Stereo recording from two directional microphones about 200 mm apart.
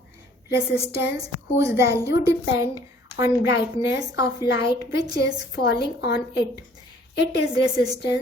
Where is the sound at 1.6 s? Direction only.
15° right (ahead or behind).